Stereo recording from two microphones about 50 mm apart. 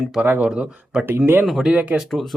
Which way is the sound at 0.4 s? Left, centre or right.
Centre.